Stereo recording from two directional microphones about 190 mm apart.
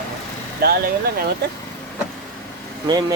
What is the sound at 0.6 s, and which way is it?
Speech, 55° right (ahead or behind).